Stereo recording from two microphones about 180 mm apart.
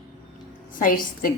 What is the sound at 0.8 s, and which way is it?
Speech, 50° left (ahead or behind).